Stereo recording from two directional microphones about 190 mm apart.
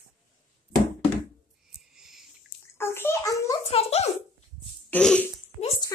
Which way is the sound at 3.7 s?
35° left (ahead or behind).